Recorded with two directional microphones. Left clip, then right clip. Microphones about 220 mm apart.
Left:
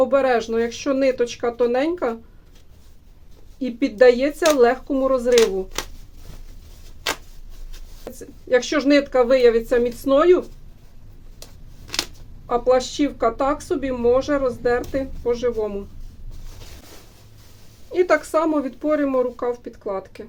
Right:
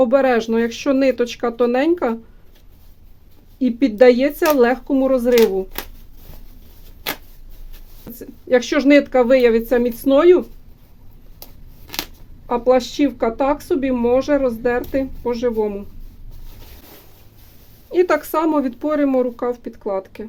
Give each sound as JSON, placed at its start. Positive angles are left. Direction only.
{"t": 0.0, "sound": "speech", "side_deg": -45}
{"t": 3.6, "sound": "speech", "side_deg": -40}
{"t": 8.2, "sound": "speech", "side_deg": -40}
{"t": 12.5, "sound": "speech", "side_deg": -40}
{"t": 17.9, "sound": "speech", "side_deg": -45}